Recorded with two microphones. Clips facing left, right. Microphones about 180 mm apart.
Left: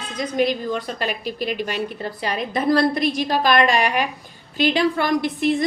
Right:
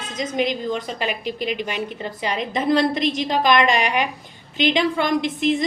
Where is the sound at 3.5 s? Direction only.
45° left (ahead or behind).